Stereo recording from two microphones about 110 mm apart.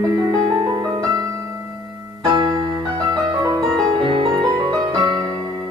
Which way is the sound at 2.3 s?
40° right (ahead or behind).